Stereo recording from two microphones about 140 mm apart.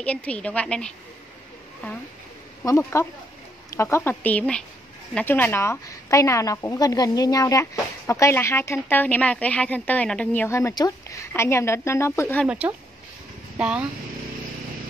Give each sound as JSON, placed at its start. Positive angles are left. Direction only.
{"t": 0.0, "sound": "a woman's voice", "side_deg": 10}
{"t": 2.6, "sound": "a woman's voice", "side_deg": 20}
{"t": 12.4, "sound": "speech", "side_deg": -10}